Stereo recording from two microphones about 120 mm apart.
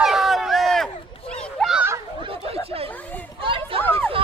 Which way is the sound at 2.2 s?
50° right (ahead or behind).